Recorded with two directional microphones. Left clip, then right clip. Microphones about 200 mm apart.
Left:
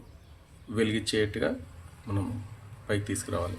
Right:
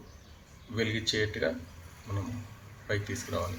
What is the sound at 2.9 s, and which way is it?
Speech, 40° left (ahead or behind).